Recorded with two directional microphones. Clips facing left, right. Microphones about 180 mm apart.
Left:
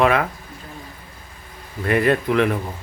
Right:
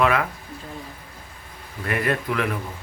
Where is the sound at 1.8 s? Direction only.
25° left (ahead or behind).